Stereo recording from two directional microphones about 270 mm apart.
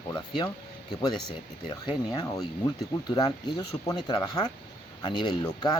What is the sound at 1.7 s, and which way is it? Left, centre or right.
Speech, centre.